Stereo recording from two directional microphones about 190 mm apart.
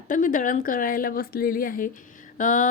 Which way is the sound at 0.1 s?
45° left (ahead or behind).